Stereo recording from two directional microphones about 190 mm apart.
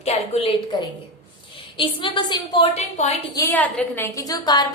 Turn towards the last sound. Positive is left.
turn(degrees=20)  # may be behind; listen again after turning